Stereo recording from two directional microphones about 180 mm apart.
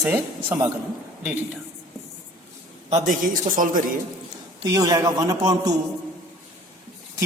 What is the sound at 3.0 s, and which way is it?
Speech, 50° right (ahead or behind).